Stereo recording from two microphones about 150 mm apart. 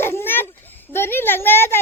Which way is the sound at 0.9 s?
15° left (ahead or behind).